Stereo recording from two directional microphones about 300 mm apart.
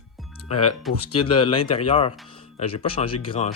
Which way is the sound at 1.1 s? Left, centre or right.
Centre.